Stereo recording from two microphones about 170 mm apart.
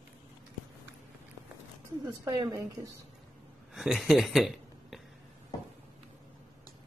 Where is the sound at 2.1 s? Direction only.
25° right (ahead or behind).